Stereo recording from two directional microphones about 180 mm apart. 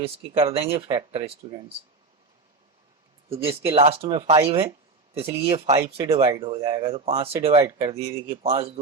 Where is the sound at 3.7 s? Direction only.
35° right (ahead or behind).